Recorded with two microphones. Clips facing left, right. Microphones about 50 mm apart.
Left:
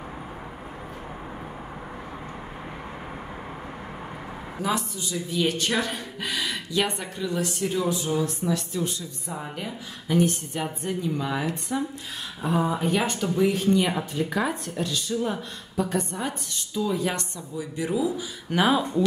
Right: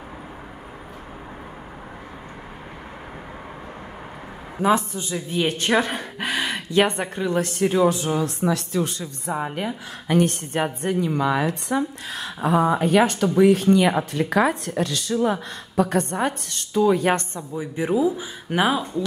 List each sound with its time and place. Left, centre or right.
4.6 s speech: right
17.1 s speech: right
18.7 s speech: centre